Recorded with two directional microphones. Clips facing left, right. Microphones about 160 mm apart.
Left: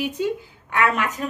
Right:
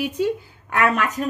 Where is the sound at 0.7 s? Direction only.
40° right (ahead or behind).